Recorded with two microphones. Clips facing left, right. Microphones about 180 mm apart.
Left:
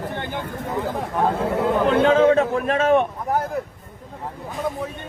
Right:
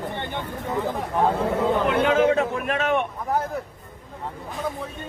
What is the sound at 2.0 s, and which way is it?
A man's voice, 35° left (ahead or behind).